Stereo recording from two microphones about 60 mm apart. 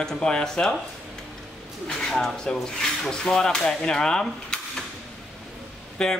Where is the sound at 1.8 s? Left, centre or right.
Centre.